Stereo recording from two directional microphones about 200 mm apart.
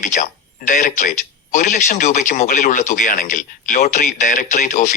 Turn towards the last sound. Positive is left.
turn(degrees=40)  # may be behind; listen again after turning